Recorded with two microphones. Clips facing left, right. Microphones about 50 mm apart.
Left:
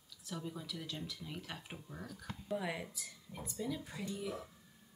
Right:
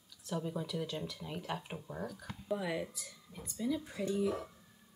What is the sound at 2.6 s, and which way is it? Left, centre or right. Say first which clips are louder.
Speech: right 4 dB; centre.